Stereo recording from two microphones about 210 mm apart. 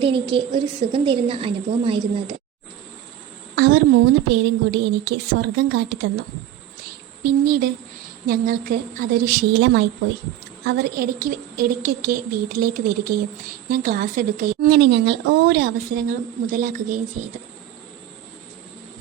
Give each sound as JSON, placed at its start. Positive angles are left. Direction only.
{"t": 0.0, "sound": "a woman's voice", "side_deg": -25}
{"t": 3.5, "sound": "a woman's voice", "side_deg": -50}
{"t": 7.4, "sound": "a woman's voice", "side_deg": -45}